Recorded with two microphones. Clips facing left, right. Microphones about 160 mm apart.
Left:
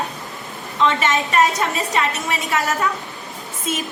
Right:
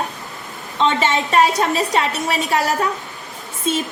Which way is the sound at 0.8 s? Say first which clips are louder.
Right 1 dB; 30° right (ahead or behind).